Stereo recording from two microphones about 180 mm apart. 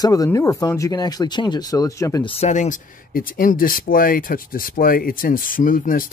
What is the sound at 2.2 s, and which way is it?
Speech, 35° left (ahead or behind).